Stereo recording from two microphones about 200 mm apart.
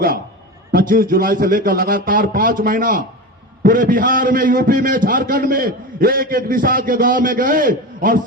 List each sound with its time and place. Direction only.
0.7 s a man's voice: 45° right (ahead or behind)